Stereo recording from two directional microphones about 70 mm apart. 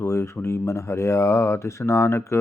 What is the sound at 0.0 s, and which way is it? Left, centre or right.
Speech, left.